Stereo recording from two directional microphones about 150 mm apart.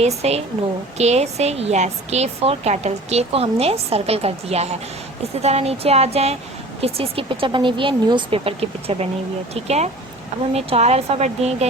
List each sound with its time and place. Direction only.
0.0 s a woman's voice: 45° right (ahead or behind)